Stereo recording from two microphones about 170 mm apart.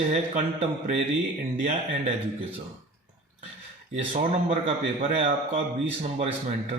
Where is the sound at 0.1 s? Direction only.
40° right (ahead or behind).